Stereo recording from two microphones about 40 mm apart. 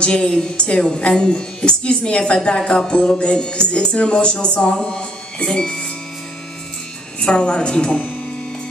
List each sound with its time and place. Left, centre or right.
0.0 s speech: left
7.2 s speech: left